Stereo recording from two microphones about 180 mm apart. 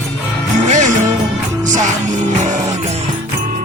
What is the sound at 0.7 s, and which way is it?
Music, 45° right (ahead or behind).